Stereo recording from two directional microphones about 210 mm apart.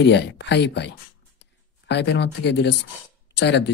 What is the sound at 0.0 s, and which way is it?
Speech, 55° left (ahead or behind).